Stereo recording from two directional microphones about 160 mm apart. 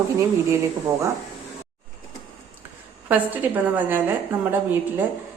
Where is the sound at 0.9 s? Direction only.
20° right (ahead or behind).